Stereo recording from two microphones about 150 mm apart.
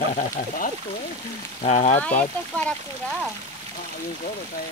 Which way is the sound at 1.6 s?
50° left (ahead or behind).